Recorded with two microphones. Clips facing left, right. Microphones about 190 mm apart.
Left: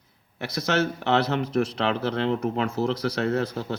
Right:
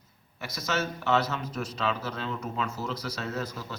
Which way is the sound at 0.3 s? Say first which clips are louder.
Left 6 dB; 65° left (ahead or behind).